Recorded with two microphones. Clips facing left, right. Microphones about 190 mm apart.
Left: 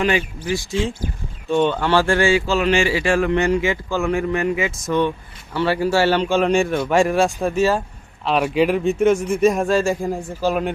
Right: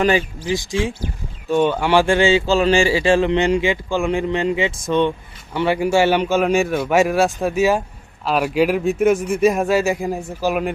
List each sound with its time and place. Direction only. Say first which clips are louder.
0.0 s speech: right 3 dB; 35° right (ahead or behind)
0.4 s a man's voice: right 1 dB; 15° right (ahead or behind)